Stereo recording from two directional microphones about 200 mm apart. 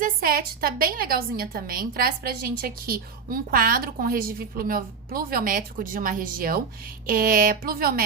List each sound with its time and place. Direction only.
0.0 s a woman's voice: 45° right (ahead or behind)